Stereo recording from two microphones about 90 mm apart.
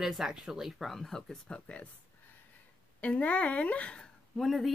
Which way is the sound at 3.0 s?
15° left (ahead or behind).